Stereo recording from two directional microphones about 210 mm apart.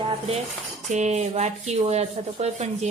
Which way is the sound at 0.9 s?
35° right (ahead or behind).